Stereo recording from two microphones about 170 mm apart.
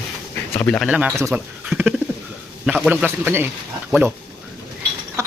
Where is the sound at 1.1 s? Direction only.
15° right (ahead or behind).